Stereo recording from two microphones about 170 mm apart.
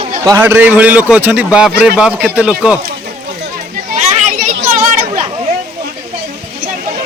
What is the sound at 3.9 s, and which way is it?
Children playing, 45° right (ahead or behind).